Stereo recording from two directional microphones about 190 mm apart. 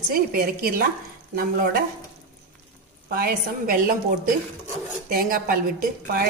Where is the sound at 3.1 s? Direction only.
50° right (ahead or behind).